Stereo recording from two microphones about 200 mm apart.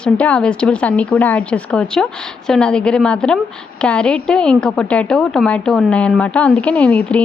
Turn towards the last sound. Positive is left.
turn(degrees=5)  # may be behind; listen again after turning